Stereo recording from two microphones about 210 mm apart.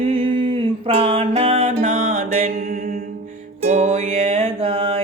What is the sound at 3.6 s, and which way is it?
Music, 35° right (ahead or behind).